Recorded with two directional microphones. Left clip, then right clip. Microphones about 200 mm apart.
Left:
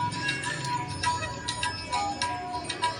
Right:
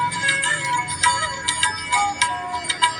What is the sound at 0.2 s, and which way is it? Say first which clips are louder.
Music: right 10 dB; 25° right (ahead or behind).